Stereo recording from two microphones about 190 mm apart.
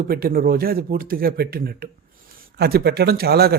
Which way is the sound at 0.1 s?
50° right (ahead or behind).